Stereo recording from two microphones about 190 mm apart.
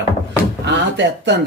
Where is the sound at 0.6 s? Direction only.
70° right (ahead or behind).